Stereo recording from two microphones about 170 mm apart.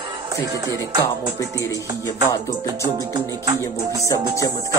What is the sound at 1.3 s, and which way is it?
Speech, 20° left (ahead or behind).